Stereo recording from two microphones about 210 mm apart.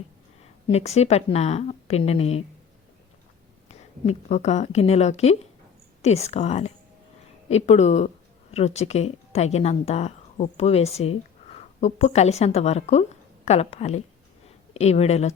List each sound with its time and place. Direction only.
0.7 s a woman's voice: 30° left (ahead or behind)
3.7 s a woman's voice: 30° left (ahead or behind)